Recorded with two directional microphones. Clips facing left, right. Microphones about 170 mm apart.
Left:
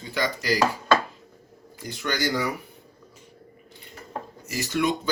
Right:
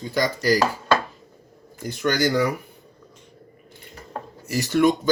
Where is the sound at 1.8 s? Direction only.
50° right (ahead or behind).